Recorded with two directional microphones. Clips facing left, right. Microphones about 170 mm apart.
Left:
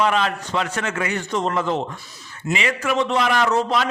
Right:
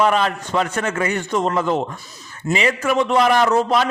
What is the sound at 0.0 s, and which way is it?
A man's voice, 45° right (ahead or behind).